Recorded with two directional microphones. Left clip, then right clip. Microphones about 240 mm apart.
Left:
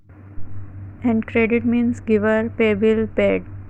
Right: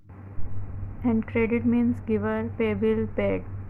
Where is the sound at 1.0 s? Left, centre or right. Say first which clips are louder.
Left 6 dB; centre.